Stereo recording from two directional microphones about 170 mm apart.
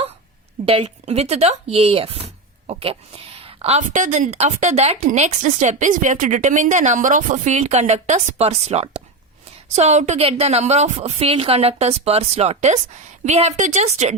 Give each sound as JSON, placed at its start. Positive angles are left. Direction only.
{"t": 0.6, "sound": "a woman's voice", "side_deg": -35}